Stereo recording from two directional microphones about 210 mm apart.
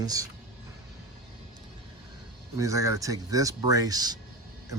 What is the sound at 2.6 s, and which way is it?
Speech, 15° right (ahead or behind).